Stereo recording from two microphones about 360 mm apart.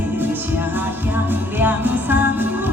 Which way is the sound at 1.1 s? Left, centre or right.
Centre.